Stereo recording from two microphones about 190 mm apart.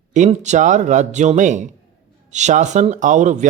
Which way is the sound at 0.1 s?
40° right (ahead or behind).